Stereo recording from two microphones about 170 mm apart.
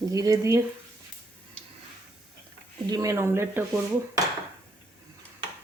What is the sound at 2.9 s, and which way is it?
Speech, 20° right (ahead or behind).